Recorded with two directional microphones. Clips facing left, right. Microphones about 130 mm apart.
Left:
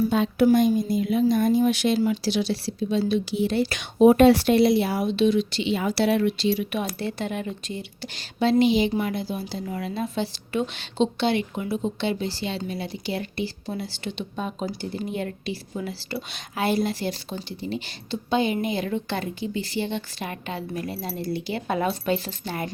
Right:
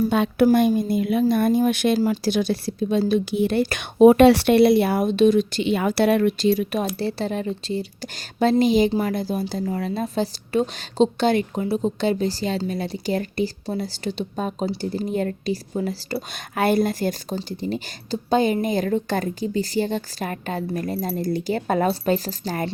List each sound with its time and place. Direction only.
0.1 s a woman's voice: 65° right (ahead or behind); by 16.1 s 40° right (ahead or behind)
16.1 s speech: 55° right (ahead or behind); by 22.7 s 40° right (ahead or behind)